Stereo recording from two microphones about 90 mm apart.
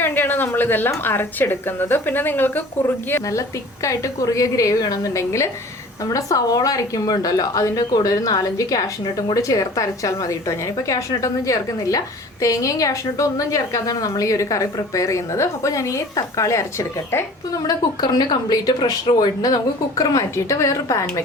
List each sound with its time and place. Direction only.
0.0 s a woman's voice: 20° left (ahead or behind)
17.7 s a woman's voice: 50° left (ahead or behind); by 20.7 s 35° left (ahead or behind)